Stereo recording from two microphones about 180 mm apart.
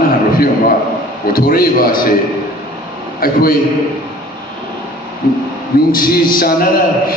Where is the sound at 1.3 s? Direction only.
55° left (ahead or behind).